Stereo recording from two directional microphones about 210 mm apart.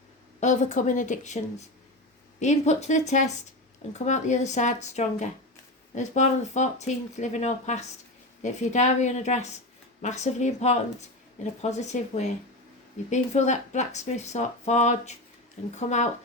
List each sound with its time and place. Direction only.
0.3 s speech: 35° left (ahead or behind)